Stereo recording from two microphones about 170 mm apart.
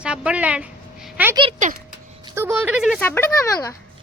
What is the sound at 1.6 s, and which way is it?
Speech, 50° right (ahead or behind).